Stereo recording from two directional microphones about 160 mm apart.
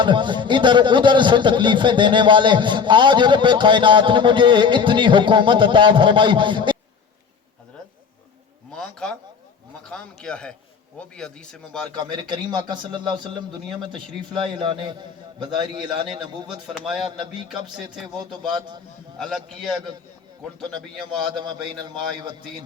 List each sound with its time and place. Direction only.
0.0 s speech: 30° right (ahead or behind)
8.7 s a sound: 5° left (ahead or behind)
9.8 s speech: 5° left (ahead or behind)
11.9 s speech: 30° right (ahead or behind)
14.4 s speech: 30° right (ahead or behind)
16.7 s speech: centre (ahead or behind)
18.5 s speech: 30° right (ahead or behind)
19.2 s speech: centre (ahead or behind)
20.7 s speech: 30° right (ahead or behind)